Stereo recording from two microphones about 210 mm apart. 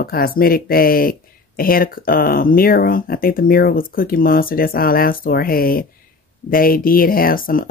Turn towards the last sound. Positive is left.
turn(degrees=45)  # may be behind; listen again after turning